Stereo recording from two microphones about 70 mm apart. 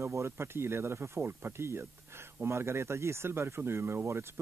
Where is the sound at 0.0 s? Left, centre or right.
Right.